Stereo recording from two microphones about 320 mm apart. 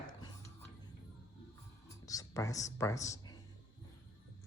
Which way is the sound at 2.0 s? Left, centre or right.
Centre.